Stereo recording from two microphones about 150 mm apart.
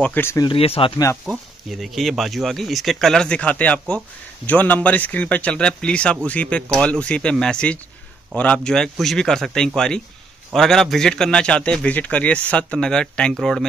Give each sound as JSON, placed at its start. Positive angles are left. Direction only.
{"t": 0.0, "sound": "speech", "side_deg": 15}
{"t": 0.4, "sound": "speech", "side_deg": 35}
{"t": 1.2, "sound": "a man's voice", "side_deg": -5}